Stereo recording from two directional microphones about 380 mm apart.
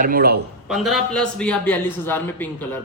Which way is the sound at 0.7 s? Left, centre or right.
Centre.